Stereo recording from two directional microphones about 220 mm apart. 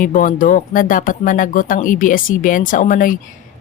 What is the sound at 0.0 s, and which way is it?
Speech, 35° left (ahead or behind).